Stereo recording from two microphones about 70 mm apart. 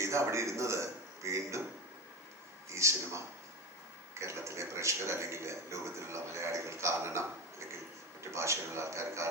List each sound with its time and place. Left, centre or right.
0.0 s a man's voice: right
2.7 s a man's voice: right